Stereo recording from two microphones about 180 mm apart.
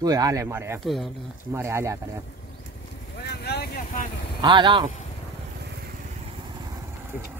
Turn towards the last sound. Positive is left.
turn(degrees=-20)  # may be behind; listen again after turning